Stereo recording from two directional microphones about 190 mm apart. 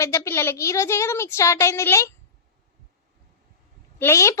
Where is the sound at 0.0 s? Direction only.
15° left (ahead or behind).